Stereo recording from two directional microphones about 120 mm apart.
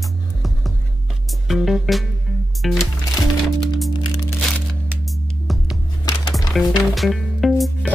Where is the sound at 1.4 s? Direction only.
Centre (ahead or behind).